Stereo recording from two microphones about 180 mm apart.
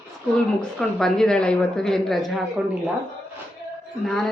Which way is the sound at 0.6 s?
5° left (ahead or behind).